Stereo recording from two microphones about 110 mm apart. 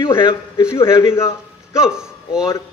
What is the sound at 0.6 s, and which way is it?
A man's voice, 30° left (ahead or behind).